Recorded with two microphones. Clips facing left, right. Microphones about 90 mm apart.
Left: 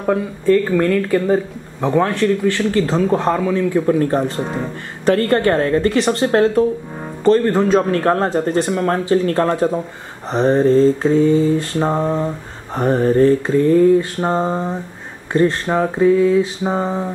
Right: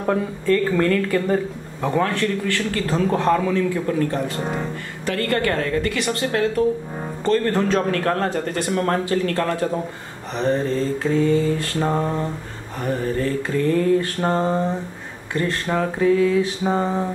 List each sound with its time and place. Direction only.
0.1 s a woman's voice: 20° left (ahead or behind)
7.6 s mantra: 20° left (ahead or behind)
8.0 s speech: 25° left (ahead or behind)
12.7 s a woman's voice: 40° left (ahead or behind)
13.6 s speech: 25° left (ahead or behind)
16.6 s mantra: 15° left (ahead or behind)